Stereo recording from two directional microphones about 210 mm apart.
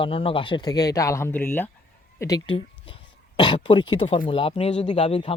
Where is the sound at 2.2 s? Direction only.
20° left (ahead or behind).